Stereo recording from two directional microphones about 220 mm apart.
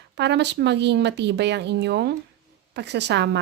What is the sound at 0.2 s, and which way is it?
A woman's voice, 50° right (ahead or behind).